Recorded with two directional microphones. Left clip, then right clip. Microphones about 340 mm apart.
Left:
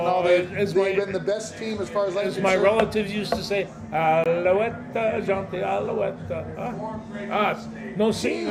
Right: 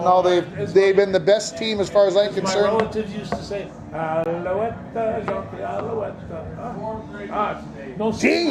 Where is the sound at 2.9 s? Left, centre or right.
Left.